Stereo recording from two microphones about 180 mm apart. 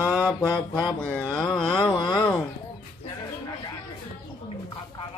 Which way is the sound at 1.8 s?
25° left (ahead or behind).